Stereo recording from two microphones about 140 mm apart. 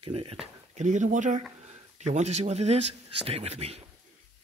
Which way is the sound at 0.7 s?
60° right (ahead or behind).